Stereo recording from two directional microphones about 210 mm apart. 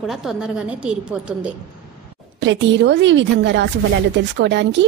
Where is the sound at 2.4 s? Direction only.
60° right (ahead or behind).